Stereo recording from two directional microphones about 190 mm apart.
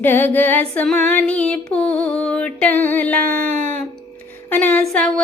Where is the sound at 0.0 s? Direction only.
10° left (ahead or behind).